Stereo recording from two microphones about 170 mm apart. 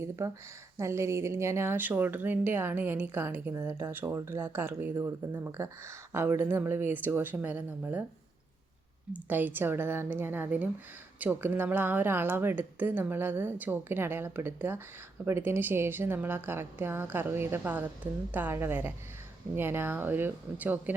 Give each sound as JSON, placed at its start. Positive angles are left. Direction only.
{"t": 0.2, "sound": "speech", "side_deg": -15}
{"t": 9.1, "sound": "speech", "side_deg": -10}